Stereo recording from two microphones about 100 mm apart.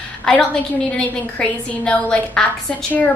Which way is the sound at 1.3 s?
10° left (ahead or behind).